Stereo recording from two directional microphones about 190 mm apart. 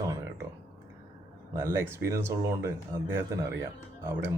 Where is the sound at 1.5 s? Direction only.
15° right (ahead or behind).